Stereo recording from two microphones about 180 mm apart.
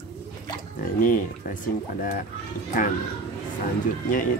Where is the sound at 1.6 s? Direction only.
50° left (ahead or behind).